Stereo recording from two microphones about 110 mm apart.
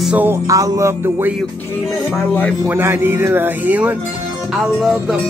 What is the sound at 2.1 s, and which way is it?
Speech, 15° left (ahead or behind).